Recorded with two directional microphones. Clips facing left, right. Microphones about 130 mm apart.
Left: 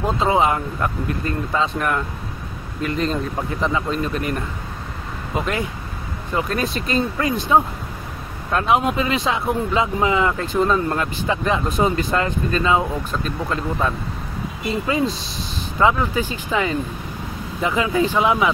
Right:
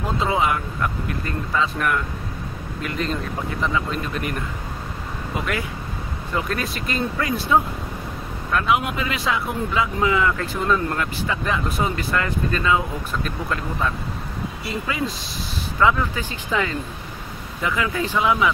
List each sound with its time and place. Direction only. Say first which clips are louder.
0.3 s speech: left 4 dB; 30° left (ahead or behind)
3.6 s speech: left 3 dB; 30° left (ahead or behind)
5.4 s speech: left 4 dB; 25° left (ahead or behind)
15.8 s speech: left 2 dB; 15° left (ahead or behind)